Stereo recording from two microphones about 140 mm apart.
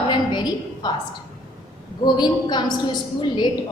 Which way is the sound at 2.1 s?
30° left (ahead or behind).